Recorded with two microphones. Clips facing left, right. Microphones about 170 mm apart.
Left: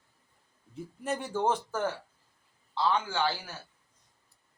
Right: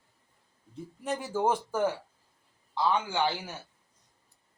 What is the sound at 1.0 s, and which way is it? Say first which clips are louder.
A man's voice: right 1 dB; centre (ahead or behind).